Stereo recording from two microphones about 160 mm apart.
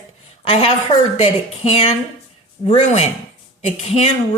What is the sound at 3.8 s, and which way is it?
Speech, 40° left (ahead or behind).